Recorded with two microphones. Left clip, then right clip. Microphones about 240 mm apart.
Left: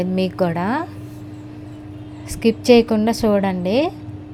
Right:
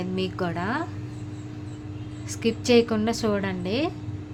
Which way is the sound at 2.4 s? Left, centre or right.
Left.